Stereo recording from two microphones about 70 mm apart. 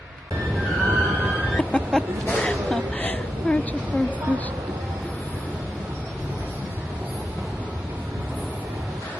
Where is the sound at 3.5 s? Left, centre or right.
Centre.